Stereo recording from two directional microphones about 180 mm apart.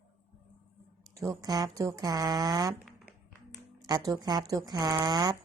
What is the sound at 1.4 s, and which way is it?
Speech, 20° right (ahead or behind).